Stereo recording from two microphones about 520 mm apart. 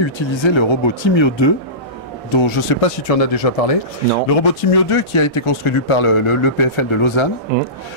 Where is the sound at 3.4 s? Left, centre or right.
Left.